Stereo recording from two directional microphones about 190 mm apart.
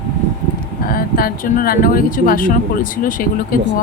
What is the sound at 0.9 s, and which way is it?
Speech, 50° left (ahead or behind).